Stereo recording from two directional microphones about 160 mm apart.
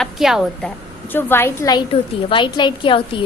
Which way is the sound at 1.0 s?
15° left (ahead or behind).